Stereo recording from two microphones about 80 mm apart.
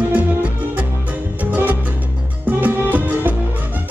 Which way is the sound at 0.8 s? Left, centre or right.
Right.